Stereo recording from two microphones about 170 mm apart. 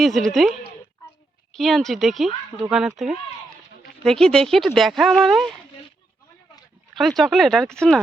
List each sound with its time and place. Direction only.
0.0 s speech: centre (ahead or behind)
1.5 s speech: centre (ahead or behind)
6.9 s speech: centre (ahead or behind)